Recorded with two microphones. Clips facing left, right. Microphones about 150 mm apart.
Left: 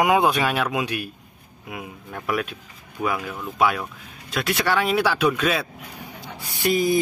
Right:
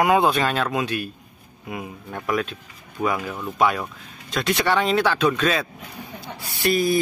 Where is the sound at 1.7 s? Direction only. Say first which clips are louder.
Right 3 dB; centre (ahead or behind).